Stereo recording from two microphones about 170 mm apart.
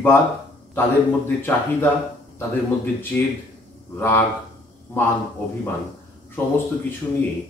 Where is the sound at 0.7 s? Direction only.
15° left (ahead or behind).